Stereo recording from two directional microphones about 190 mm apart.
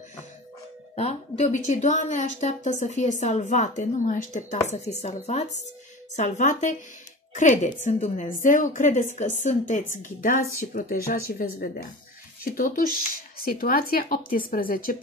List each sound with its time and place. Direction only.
0.9 s a woman's voice: 35° left (ahead or behind); by 15.0 s 50° left (ahead or behind)